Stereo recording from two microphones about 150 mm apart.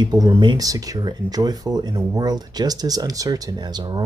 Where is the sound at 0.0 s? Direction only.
25° right (ahead or behind).